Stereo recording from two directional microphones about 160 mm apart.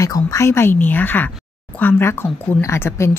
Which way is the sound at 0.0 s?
20° left (ahead or behind).